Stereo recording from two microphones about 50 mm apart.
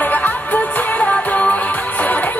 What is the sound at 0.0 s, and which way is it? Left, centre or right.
Music, left.